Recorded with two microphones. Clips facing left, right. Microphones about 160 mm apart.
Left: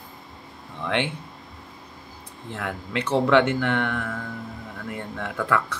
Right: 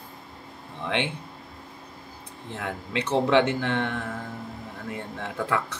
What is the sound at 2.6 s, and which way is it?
Speech, 25° right (ahead or behind).